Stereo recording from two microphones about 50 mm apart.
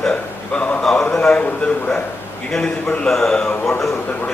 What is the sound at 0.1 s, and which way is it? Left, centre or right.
Speech, left.